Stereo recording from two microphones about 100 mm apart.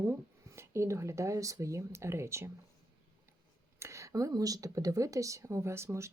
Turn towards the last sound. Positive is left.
turn(degrees=-30)  # may be behind; listen again after turning